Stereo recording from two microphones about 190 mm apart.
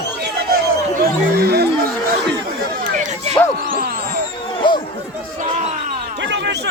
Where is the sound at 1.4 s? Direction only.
55° right (ahead or behind).